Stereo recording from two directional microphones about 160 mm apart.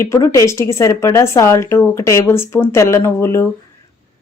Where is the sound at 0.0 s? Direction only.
15° left (ahead or behind).